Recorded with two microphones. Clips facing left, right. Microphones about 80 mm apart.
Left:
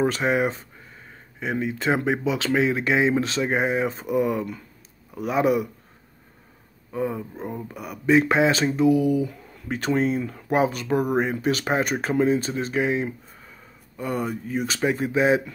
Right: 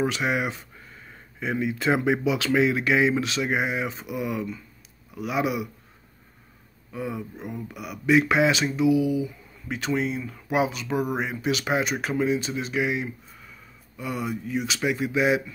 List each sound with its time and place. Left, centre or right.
0.0 s speech: left
6.9 s speech: left